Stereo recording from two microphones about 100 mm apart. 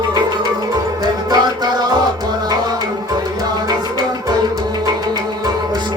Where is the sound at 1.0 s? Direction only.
45° right (ahead or behind).